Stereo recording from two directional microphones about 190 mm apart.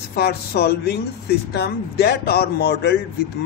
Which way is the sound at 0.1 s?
55° left (ahead or behind).